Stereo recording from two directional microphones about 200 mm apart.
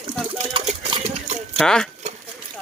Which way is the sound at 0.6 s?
30° right (ahead or behind).